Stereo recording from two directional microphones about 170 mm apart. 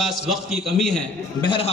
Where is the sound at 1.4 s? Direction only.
30° left (ahead or behind).